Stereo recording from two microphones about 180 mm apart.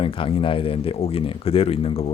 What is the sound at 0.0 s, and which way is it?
Speech, 30° left (ahead or behind).